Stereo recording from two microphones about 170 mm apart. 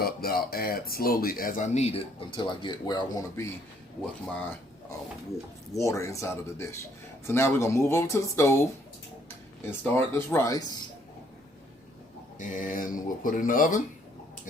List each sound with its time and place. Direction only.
0.0 s speech: 65° left (ahead or behind); by 3.5 s 20° left (ahead or behind)
5.7 s speech: 20° left (ahead or behind)
12.4 s speech: 50° left (ahead or behind)